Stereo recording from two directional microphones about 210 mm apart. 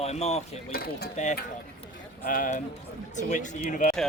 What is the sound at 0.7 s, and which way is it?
Speech, 50° left (ahead or behind).